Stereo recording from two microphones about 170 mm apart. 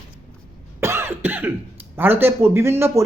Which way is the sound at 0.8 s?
15° right (ahead or behind).